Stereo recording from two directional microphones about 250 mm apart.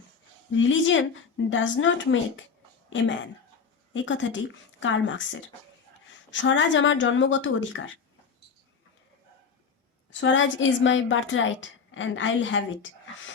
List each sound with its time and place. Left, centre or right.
0.5 s a woman's voice: left
3.9 s a woman's voice: left
10.1 s a woman's voice: left